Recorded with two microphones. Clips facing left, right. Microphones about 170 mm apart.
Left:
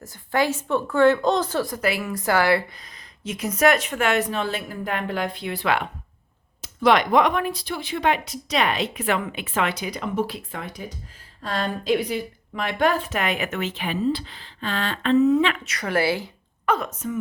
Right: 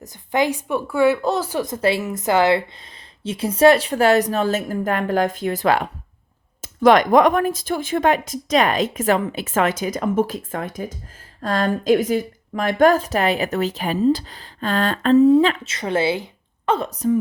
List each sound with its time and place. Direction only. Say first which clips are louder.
0.0 s a woman's voice: right 2 dB; 20° right (ahead or behind); by 17.2 s 35° right (ahead or behind)